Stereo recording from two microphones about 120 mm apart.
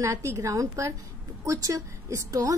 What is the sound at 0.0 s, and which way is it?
A woman's voice, 25° right (ahead or behind).